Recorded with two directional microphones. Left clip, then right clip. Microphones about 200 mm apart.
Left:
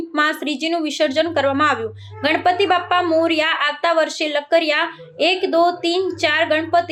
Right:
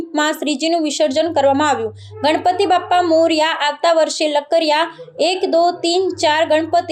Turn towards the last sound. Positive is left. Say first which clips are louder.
# right 2 dB
turn(degrees=-10)  # may be behind; listen again after turning